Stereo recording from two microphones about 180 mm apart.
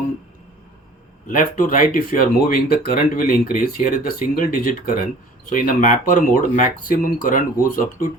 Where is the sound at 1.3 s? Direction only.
50° left (ahead or behind).